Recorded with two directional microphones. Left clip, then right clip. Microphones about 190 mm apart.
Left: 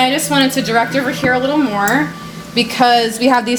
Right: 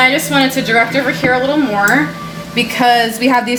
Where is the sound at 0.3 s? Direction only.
50° left (ahead or behind).